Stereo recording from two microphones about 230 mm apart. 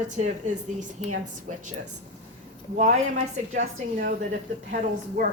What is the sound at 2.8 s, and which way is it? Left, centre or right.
Speech, right.